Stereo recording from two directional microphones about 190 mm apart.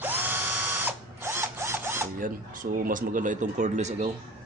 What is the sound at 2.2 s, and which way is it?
Speech, 45° right (ahead or behind).